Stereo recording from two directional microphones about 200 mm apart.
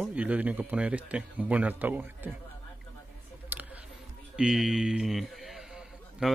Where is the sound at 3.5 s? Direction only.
10° right (ahead or behind).